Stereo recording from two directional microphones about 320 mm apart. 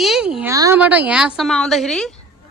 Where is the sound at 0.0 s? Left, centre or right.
Centre.